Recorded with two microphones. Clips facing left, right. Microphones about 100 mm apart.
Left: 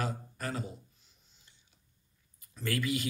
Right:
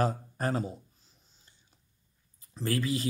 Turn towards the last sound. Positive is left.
turn(degrees=-35)  # may be behind; listen again after turning